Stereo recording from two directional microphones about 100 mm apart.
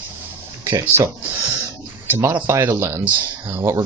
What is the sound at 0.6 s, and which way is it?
Speech, 25° right (ahead or behind).